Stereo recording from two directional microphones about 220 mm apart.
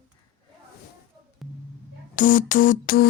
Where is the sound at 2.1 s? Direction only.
35° left (ahead or behind).